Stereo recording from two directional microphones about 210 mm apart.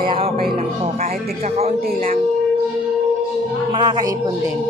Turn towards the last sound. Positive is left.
turn(degrees=-20)  # may be behind; listen again after turning